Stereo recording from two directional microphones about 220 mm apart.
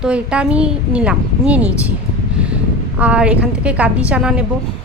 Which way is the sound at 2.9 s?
5° right (ahead or behind).